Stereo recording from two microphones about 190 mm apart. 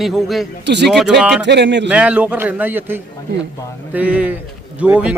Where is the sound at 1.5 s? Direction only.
65° right (ahead or behind).